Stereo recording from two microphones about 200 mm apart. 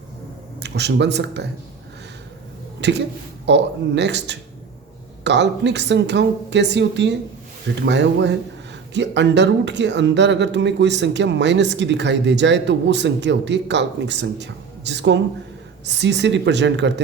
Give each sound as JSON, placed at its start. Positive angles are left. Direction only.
{"t": 0.6, "sound": "speech", "side_deg": -60}
{"t": 2.8, "sound": "speech", "side_deg": -60}